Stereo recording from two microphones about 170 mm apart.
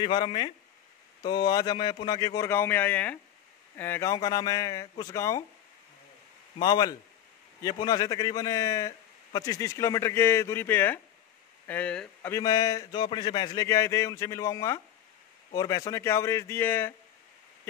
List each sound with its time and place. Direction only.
0.0 s a man's voice: 30° left (ahead or behind)
6.6 s a man's voice: 25° left (ahead or behind)